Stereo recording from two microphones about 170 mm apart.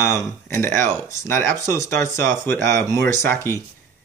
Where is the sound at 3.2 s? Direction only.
15° left (ahead or behind).